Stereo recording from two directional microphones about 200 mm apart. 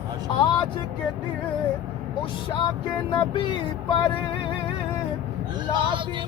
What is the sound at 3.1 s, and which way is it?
Music, 25° left (ahead or behind).